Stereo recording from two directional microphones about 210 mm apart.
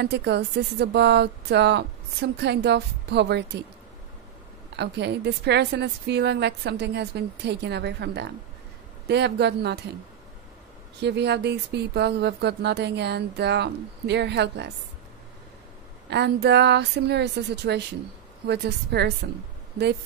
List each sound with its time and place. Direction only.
0.0 s speech: 55° right (ahead or behind)
4.7 s speech: 55° right (ahead or behind)
11.0 s speech: 55° right (ahead or behind)
16.1 s speech: 55° right (ahead or behind)